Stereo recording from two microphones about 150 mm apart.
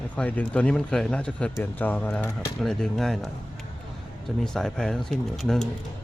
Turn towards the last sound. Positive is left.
turn(degrees=5)  # may be behind; listen again after turning